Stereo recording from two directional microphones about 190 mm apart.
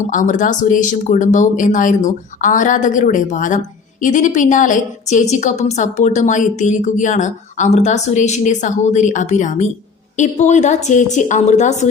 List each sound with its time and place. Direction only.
0.1 s a woman's voice: 40° left (ahead or behind)